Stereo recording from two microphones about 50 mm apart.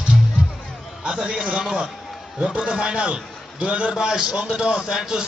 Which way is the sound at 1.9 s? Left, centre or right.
Centre.